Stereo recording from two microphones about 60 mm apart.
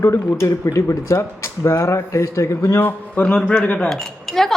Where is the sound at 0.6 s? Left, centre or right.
Left.